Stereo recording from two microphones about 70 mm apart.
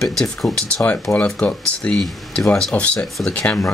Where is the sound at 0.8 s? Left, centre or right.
Left.